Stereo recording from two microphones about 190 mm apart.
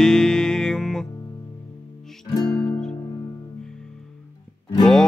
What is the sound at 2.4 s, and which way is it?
Music, 5° left (ahead or behind).